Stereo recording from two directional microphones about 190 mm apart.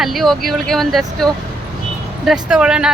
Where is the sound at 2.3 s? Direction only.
5° right (ahead or behind).